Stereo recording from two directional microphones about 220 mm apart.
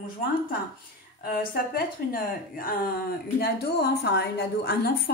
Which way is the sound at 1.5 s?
40° left (ahead or behind).